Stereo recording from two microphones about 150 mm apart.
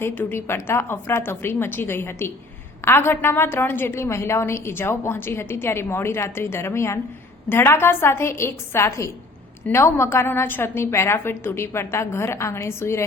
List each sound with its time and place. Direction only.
0.0 s a woman's voice: 15° left (ahead or behind)